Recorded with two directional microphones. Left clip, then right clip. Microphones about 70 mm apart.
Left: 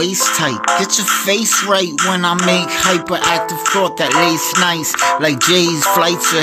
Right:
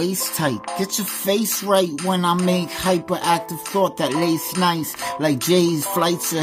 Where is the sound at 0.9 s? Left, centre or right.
Right.